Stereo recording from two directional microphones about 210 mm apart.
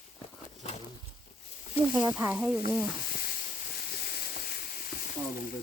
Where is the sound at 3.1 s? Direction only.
45° left (ahead or behind).